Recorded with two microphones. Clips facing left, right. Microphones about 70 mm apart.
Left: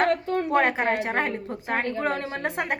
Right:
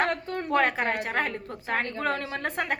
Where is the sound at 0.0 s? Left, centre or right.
Left.